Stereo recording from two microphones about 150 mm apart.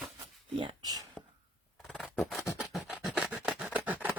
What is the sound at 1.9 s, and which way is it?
Scissors, 5° left (ahead or behind).